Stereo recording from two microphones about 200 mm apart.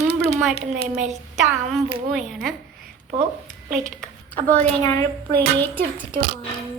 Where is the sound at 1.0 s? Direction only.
35° right (ahead or behind).